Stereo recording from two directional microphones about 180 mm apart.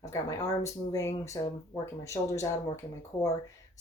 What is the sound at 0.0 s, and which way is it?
Speech, 15° left (ahead or behind).